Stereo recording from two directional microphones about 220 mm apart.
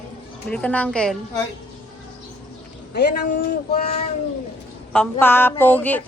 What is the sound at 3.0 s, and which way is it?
Speech, 45° left (ahead or behind).